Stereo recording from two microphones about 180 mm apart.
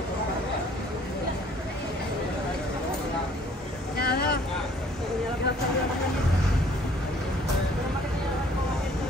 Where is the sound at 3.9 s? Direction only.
60° left (ahead or behind).